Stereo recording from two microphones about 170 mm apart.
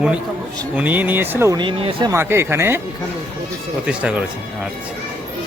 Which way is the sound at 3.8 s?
5° right (ahead or behind).